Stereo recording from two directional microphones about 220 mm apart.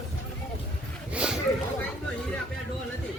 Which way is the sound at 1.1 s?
5° right (ahead or behind).